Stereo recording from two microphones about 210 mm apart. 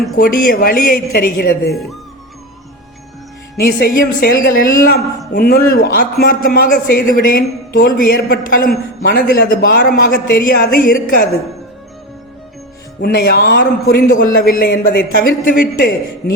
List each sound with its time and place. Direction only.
0.2 s a man's voice: 45° left (ahead or behind)
3.6 s a man's voice: 45° left (ahead or behind)
13.0 s a man's voice: 45° left (ahead or behind)